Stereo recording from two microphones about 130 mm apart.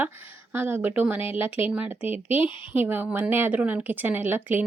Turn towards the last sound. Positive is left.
turn(degrees=-15)  # may be behind; listen again after turning